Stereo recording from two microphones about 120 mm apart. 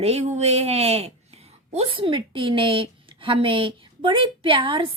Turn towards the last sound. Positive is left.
turn(degrees=-45)  # may be behind; listen again after turning